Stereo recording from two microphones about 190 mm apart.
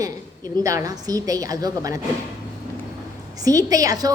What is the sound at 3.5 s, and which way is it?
Speech, 20° right (ahead or behind).